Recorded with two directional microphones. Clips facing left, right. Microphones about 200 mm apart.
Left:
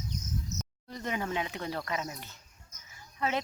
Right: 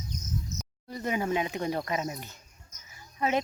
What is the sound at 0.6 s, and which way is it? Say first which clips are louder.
A woman's voice: right 3 dB; 5° right (ahead or behind).